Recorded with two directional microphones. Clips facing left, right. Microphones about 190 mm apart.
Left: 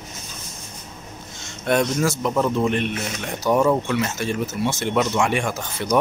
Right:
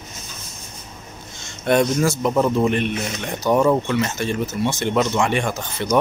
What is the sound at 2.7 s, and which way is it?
Speech, centre (ahead or behind).